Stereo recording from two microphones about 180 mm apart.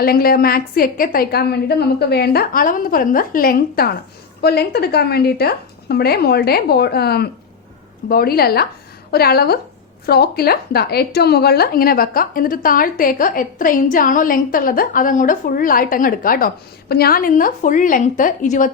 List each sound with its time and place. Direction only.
0.0 s a woman's voice: 55° left (ahead or behind)